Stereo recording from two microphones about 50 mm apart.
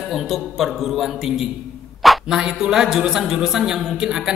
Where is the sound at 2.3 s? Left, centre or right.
Centre.